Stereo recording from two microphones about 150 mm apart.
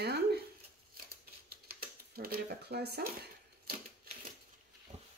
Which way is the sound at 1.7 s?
90° right.